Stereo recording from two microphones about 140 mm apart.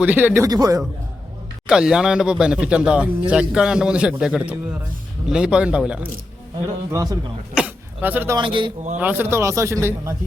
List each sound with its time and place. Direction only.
0.0 s speech: 10° right (ahead or behind)
0.4 s speech: 25° right (ahead or behind)
1.6 s speech: 5° right (ahead or behind)
6.9 s speech: 25° right (ahead or behind)
7.5 s speech: 10° right (ahead or behind)
8.4 s a man's voice: 35° right (ahead or behind)
9.0 s speech: 15° right (ahead or behind)